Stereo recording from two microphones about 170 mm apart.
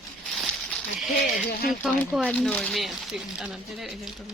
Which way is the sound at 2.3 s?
5° left (ahead or behind).